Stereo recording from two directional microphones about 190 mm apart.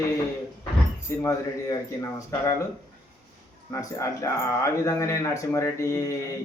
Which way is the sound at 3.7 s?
15° left (ahead or behind).